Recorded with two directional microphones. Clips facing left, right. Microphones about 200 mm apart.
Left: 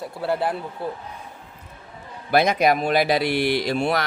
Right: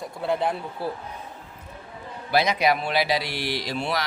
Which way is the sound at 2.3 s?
50° left (ahead or behind).